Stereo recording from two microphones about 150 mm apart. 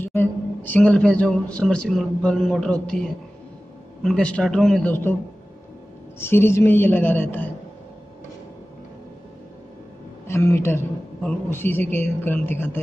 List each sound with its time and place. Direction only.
0.0 s a man's voice: 15° left (ahead or behind)
6.1 s a man's voice: 15° left (ahead or behind)
10.2 s a man's voice: 15° left (ahead or behind)